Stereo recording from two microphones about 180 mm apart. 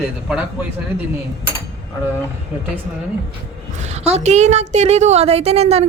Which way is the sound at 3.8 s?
35° right (ahead or behind).